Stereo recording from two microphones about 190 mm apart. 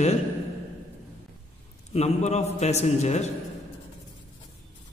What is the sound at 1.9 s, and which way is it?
A man's voice, 35° left (ahead or behind).